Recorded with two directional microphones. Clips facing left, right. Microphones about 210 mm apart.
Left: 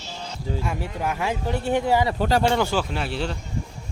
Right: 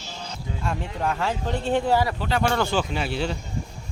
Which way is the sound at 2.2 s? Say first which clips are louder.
Left 4 dB; 40° left (ahead or behind).